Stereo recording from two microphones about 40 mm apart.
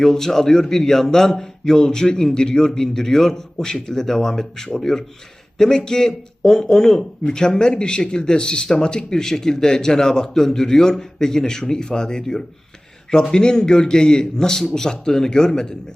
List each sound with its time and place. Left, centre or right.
0.0 s a man's voice: centre